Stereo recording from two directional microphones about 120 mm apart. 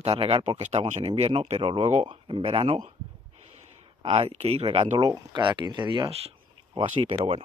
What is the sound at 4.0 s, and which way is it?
Speech, 45° right (ahead or behind).